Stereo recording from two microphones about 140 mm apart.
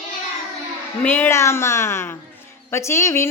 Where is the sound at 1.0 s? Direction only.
15° left (ahead or behind).